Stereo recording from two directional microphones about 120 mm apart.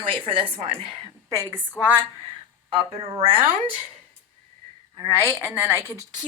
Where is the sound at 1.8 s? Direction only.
20° left (ahead or behind).